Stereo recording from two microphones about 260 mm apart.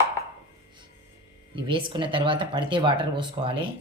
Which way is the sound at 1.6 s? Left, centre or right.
Centre.